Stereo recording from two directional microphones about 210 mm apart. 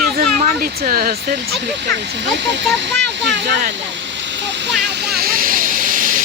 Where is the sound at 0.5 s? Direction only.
50° right (ahead or behind).